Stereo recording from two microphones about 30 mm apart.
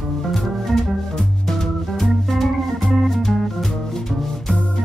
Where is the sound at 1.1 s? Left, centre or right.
Centre.